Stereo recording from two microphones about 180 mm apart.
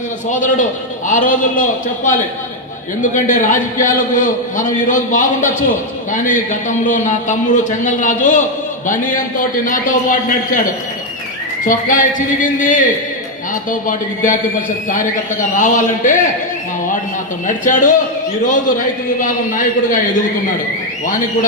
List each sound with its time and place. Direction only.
0.3 s a man's voice: 45° left (ahead or behind)
3.0 s a man's voice: 45° left (ahead or behind)
11.6 s a man's voice: 45° left (ahead or behind)
17.4 s a man's voice: 45° left (ahead or behind)